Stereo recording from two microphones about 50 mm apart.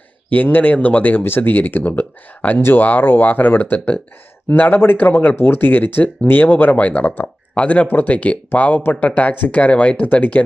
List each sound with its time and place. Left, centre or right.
0.3 s speech: left
2.6 s speech: left
2.8 s speech: left